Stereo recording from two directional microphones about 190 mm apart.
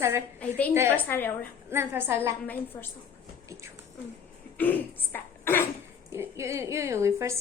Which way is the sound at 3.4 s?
15° right (ahead or behind).